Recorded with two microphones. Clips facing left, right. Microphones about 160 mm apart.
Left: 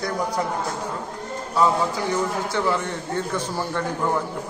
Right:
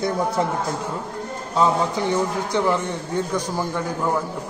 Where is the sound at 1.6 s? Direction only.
20° right (ahead or behind).